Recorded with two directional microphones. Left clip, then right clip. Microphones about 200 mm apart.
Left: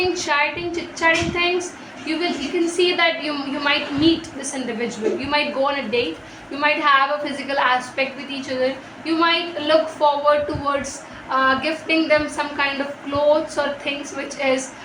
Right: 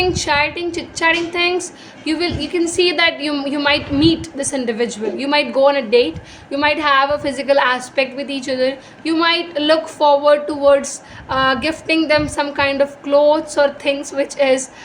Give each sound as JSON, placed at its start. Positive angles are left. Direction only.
{"t": 0.1, "sound": "a woman's voice", "side_deg": -60}